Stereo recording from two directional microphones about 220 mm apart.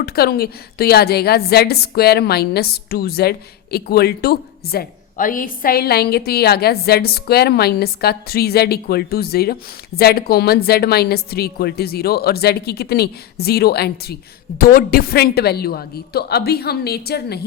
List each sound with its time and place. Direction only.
0.0 s a woman's voice: 45° left (ahead or behind)